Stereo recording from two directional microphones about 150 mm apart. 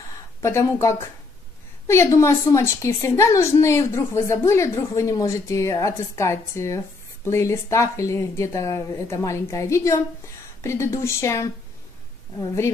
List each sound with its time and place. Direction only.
0.4 s a woman's voice: 20° left (ahead or behind)